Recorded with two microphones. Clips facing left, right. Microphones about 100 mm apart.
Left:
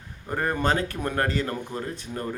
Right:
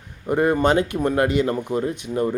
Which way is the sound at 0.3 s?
15° right (ahead or behind).